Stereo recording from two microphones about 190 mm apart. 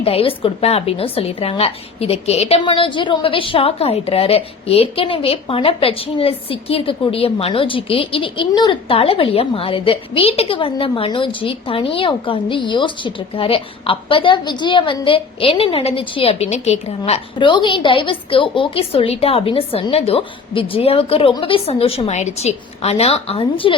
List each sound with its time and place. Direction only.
0.0 s a woman's voice: 30° left (ahead or behind)